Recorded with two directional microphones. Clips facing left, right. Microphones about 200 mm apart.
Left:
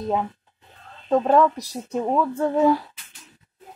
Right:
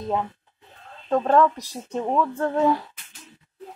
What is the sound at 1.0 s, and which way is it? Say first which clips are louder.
Speech: left 1 dB; 5° left (ahead or behind).